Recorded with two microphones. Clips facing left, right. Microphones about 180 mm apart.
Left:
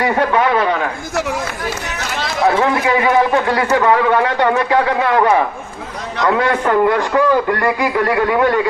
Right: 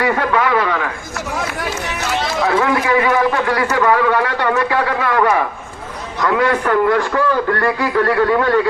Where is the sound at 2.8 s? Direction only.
25° left (ahead or behind).